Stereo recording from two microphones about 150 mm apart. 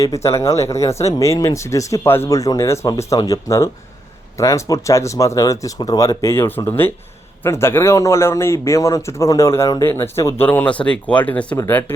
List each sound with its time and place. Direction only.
0.0 s speech: 20° left (ahead or behind)